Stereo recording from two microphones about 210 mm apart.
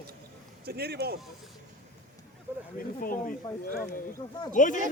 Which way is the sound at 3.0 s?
40° left (ahead or behind).